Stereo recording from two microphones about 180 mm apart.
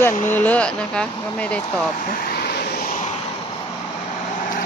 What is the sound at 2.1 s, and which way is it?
Vehicle, 55° left (ahead or behind).